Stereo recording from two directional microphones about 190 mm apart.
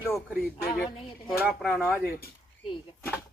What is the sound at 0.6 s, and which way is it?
Speech, 10° left (ahead or behind).